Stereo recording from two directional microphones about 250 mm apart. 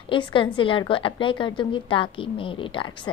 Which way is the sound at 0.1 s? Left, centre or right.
Centre.